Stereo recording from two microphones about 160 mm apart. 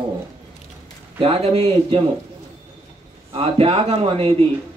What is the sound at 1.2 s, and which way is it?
Speech, 35° right (ahead or behind).